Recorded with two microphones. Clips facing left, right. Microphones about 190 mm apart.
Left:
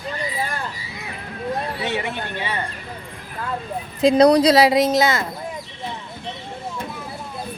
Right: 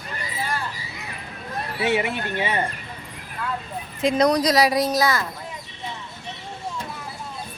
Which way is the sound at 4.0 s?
35° left (ahead or behind).